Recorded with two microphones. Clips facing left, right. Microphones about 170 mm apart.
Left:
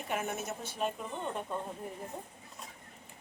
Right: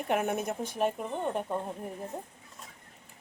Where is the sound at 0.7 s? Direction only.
60° right (ahead or behind).